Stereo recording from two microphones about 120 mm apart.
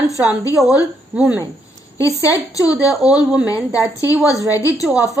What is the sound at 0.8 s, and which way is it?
Speech, 10° right (ahead or behind).